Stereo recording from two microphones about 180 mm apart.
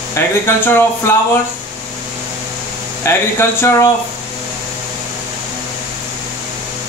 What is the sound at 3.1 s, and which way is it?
Speech, 15° left (ahead or behind).